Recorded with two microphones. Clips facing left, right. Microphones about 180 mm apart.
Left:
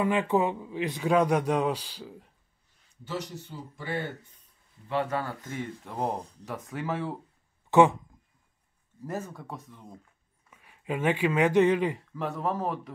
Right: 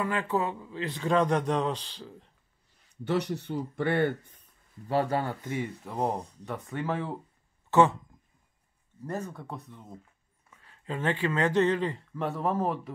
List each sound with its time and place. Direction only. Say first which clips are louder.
0.0 s speech: left 4 dB; 15° left (ahead or behind)
3.0 s speech: right 7 dB; 65° right (ahead or behind)
4.8 s speech: right 2 dB; 35° right (ahead or behind)
5.9 s speech: even; centre (ahead or behind)
7.7 s speech: left 2 dB; 15° left (ahead or behind)
9.0 s speech: even; centre (ahead or behind)
10.5 s speech: left 3 dB; 15° left (ahead or behind)
12.1 s speech: right 1 dB; centre (ahead or behind)